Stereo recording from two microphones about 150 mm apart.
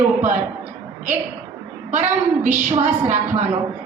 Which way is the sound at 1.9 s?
55° right (ahead or behind).